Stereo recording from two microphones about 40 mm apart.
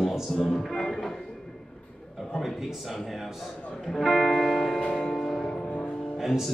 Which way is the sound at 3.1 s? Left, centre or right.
Centre.